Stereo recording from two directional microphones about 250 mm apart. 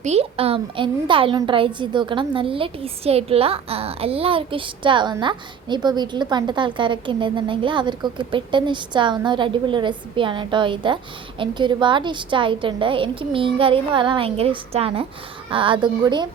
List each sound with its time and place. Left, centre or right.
0.0 s a woman's voice: right